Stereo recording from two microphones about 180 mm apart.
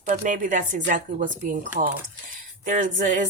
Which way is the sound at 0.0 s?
45° right (ahead or behind).